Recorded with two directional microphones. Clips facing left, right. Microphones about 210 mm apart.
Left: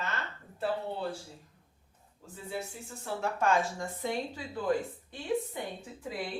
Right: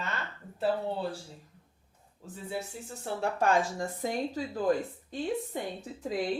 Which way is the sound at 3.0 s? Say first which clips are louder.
Right 2 dB; 35° right (ahead or behind).